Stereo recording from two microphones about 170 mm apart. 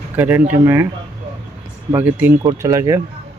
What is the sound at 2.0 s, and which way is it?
Speech, 10° right (ahead or behind).